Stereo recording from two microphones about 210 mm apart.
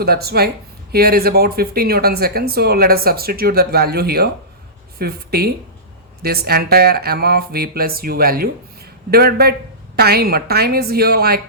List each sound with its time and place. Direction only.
0.0 s speech: 50° right (ahead or behind)